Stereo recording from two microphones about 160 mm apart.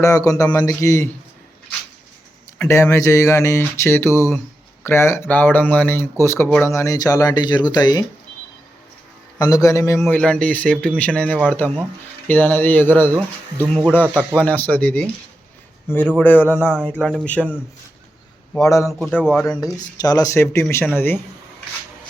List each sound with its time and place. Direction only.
0.0 s speech: 20° left (ahead or behind)
2.6 s speech: 15° left (ahead or behind)
9.4 s speech: 20° left (ahead or behind)
10.0 s speech: 5° left (ahead or behind)
18.6 s speech: 20° left (ahead or behind)
18.9 s speech: centre (ahead or behind)
19.5 s speech: 25° left (ahead or behind)